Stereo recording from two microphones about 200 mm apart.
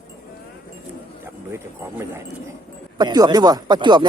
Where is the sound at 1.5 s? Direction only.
15° right (ahead or behind).